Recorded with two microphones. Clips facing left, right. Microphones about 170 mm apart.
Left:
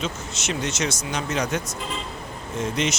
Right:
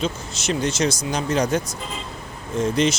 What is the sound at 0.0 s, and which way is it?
Speech, 35° right (ahead or behind).